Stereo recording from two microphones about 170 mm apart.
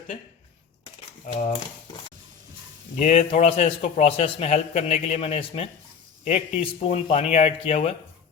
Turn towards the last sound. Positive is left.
turn(degrees=35)  # may be behind; listen again after turning